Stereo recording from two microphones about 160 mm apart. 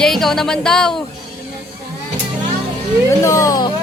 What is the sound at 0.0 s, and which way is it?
Speech, centre (ahead or behind).